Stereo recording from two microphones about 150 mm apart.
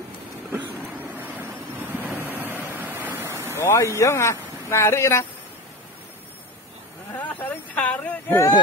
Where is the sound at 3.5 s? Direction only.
15° left (ahead or behind).